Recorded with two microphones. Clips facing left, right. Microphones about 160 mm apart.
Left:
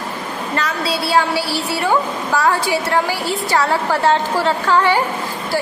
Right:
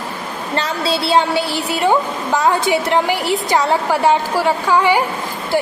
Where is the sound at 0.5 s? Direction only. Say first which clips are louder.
Right 2 dB; 25° right (ahead or behind).